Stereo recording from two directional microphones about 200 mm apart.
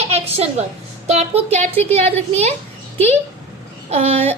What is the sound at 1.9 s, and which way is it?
Speech, 30° right (ahead or behind).